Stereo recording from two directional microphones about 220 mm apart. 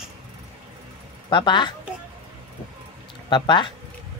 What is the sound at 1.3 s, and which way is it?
Speech, 20° left (ahead or behind).